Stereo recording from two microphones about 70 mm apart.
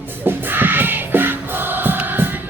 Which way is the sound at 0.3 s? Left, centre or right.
Right.